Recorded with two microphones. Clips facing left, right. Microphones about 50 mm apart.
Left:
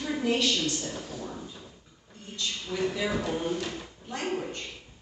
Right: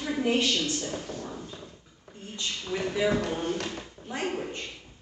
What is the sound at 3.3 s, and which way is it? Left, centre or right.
Speech, right.